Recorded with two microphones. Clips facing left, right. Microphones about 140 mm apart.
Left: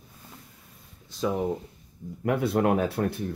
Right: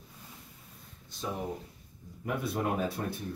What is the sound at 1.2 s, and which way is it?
Speech, 90° left.